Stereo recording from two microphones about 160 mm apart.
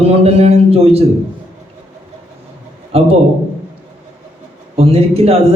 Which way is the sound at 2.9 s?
40° right (ahead or behind).